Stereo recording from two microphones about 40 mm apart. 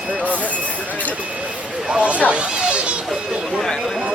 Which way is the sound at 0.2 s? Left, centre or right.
Right.